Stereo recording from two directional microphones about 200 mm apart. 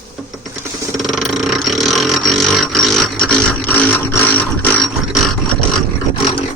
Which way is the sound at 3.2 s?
5° left (ahead or behind).